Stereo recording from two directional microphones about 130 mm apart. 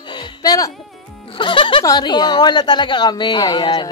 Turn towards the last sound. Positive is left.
turn(degrees=35)  # may be behind; listen again after turning